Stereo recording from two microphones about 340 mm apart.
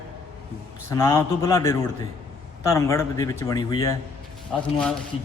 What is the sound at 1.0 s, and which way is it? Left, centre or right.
Speech, centre.